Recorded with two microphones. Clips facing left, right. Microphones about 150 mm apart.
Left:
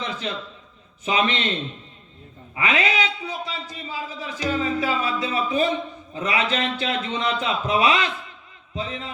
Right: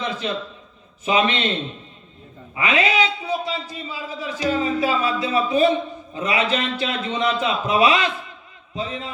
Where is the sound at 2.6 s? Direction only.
30° right (ahead or behind).